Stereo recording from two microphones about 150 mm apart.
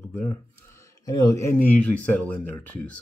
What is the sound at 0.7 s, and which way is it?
Speech, 20° left (ahead or behind).